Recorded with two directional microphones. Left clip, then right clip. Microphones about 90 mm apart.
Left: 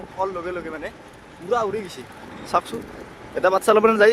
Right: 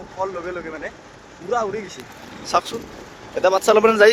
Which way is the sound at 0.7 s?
25° left (ahead or behind).